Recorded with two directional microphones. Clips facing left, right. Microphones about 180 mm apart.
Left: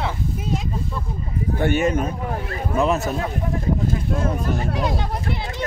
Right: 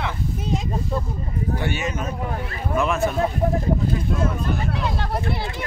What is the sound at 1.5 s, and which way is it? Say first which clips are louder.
Speech: left 9 dB; 55° left (ahead or behind).